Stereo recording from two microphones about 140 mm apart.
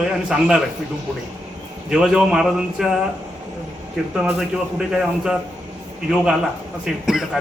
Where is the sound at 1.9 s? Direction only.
5° right (ahead or behind).